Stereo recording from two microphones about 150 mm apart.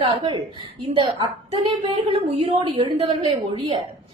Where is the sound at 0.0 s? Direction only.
35° right (ahead or behind).